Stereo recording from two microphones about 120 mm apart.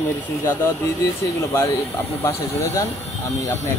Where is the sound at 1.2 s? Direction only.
25° left (ahead or behind).